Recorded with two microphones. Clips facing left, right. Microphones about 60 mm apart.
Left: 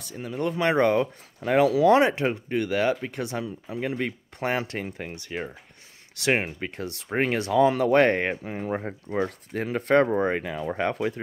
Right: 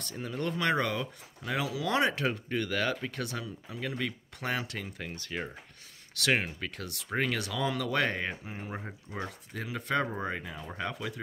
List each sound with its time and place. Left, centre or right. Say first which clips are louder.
0.0 s speech: left 3 dB; centre
0.4 s speech: left 7 dB; left
5.2 s speech: left 4 dB; centre
6.1 s speech: left 4 dB; left
8.7 s speech: left 13 dB; left
10.8 s speech: left 9 dB; left